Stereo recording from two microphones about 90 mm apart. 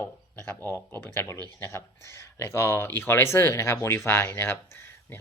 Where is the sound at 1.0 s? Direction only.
25° left (ahead or behind).